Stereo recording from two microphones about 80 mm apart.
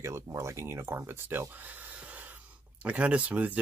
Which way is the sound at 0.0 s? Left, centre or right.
Right.